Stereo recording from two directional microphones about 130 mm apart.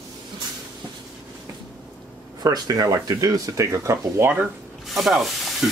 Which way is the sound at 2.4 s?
30° right (ahead or behind).